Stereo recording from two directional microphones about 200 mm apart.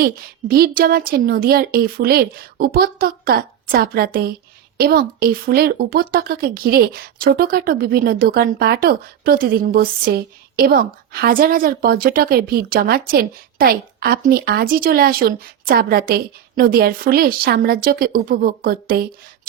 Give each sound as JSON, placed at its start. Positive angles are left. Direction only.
{"t": 0.0, "sound": "speech", "side_deg": -50}